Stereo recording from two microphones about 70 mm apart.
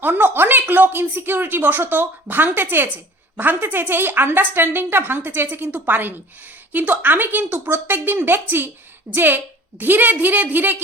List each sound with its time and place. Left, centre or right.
0.0 s speech: right